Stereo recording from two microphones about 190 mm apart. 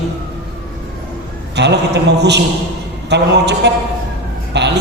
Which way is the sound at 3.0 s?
65° right (ahead or behind).